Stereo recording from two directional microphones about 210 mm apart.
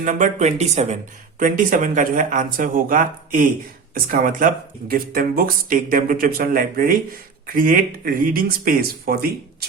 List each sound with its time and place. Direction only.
0.0 s speech: 40° right (ahead or behind)